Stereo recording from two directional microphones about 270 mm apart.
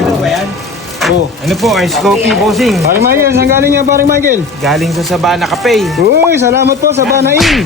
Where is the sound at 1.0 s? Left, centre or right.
Centre.